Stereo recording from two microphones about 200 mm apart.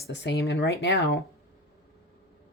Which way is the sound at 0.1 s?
60° left (ahead or behind).